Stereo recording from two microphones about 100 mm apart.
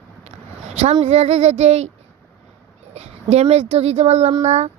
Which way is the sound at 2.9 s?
90° right.